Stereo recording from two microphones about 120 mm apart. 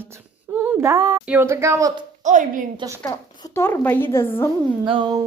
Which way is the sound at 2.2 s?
90° right.